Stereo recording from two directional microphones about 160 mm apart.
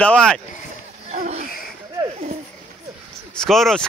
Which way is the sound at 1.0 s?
45° right (ahead or behind).